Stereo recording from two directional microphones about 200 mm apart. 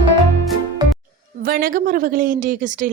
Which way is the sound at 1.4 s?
45° right (ahead or behind).